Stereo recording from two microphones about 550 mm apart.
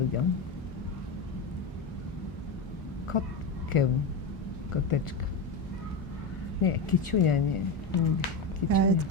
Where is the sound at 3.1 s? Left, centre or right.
Left.